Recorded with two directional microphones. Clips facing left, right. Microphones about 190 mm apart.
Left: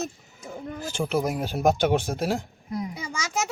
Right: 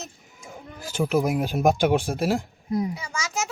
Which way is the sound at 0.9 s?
5° right (ahead or behind).